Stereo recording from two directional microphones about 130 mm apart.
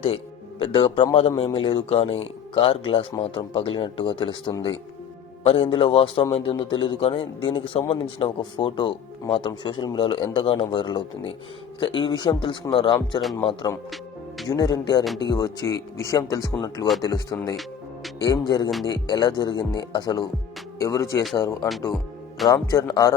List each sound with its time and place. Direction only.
0.6 s speech: 45° left (ahead or behind)
14.5 s speech: 30° left (ahead or behind)